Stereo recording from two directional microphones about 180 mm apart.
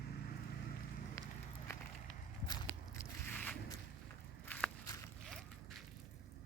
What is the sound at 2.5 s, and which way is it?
Walk, 15° left (ahead or behind).